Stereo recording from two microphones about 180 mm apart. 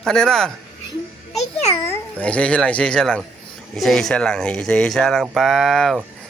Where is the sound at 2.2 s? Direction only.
5° left (ahead or behind).